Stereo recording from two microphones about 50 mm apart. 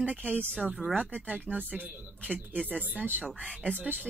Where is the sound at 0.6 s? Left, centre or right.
Centre.